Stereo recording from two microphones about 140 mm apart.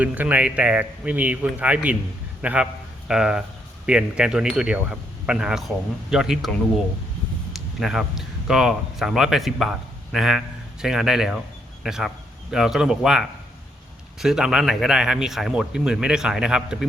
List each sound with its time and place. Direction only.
0.0 s a man's voice: 10° right (ahead or behind)
7.5 s speech: centre (ahead or behind)